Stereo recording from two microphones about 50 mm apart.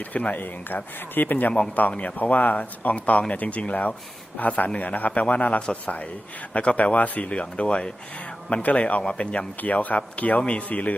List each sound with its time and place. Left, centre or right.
0.1 s a man's voice: left